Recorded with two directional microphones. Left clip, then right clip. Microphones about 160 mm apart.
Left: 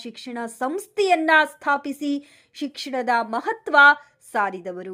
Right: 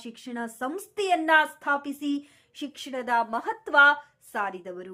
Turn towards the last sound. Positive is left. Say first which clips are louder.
# left 7 dB
turn(degrees=30)  # may be behind; listen again after turning